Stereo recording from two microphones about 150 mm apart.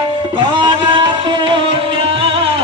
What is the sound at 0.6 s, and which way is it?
Music, 30° right (ahead or behind).